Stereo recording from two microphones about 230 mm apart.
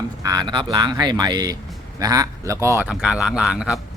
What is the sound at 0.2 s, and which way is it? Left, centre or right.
Speech, centre.